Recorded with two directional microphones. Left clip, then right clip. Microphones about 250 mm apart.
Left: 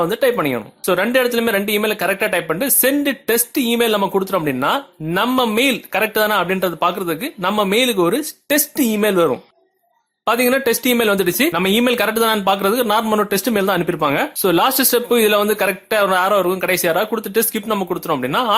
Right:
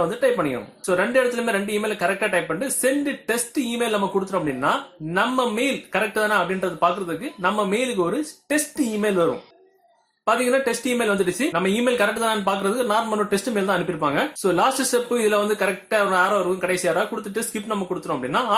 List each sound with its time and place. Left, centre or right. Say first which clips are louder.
0.9 s speech: left 4 dB; left